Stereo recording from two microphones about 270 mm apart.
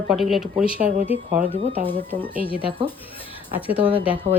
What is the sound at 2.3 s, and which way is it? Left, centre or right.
Speech, centre.